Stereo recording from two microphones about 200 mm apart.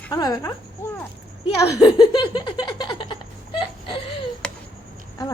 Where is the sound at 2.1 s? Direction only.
25° left (ahead or behind).